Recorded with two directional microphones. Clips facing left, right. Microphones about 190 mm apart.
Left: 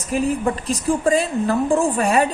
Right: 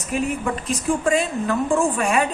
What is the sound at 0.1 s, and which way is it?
A woman's voice, 35° left (ahead or behind).